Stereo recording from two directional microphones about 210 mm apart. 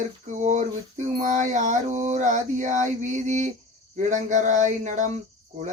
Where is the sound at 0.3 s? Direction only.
35° right (ahead or behind).